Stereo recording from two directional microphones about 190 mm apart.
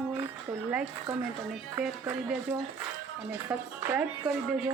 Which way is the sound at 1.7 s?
5° right (ahead or behind).